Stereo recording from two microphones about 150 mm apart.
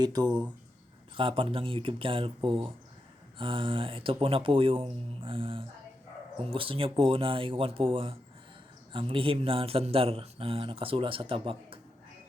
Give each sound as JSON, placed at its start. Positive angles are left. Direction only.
{"t": 0.0, "sound": "speech", "side_deg": -25}